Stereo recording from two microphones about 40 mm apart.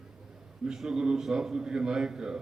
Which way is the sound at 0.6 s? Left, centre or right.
Centre.